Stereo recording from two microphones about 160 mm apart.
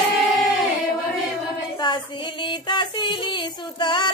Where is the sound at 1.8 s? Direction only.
30° left (ahead or behind).